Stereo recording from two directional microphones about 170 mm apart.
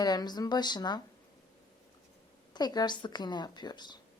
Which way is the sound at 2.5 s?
25° left (ahead or behind).